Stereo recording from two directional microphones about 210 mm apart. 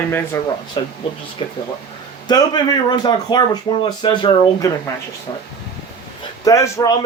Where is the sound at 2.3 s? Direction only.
20° left (ahead or behind).